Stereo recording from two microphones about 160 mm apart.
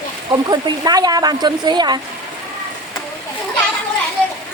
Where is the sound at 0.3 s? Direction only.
25° right (ahead or behind).